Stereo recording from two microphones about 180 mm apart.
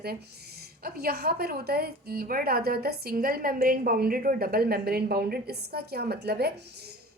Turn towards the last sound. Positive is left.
turn(degrees=-65)  # may be behind; listen again after turning